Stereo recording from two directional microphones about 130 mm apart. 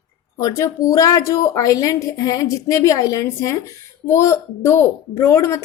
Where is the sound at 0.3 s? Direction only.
25° left (ahead or behind).